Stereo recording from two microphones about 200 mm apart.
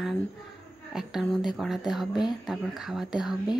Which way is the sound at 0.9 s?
Centre (ahead or behind).